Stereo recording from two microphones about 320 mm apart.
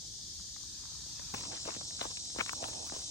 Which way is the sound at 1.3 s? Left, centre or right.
Left.